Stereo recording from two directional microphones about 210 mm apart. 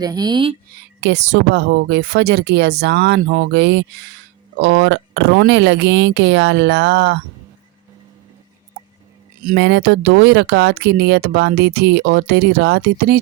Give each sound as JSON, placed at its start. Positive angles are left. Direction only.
{"t": 0.0, "sound": "speech", "side_deg": -20}
{"t": 1.0, "sound": "speech", "side_deg": -55}
{"t": 9.6, "sound": "speech", "side_deg": -55}